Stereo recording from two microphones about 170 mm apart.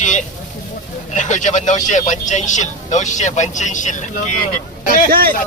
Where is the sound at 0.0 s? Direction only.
45° left (ahead or behind).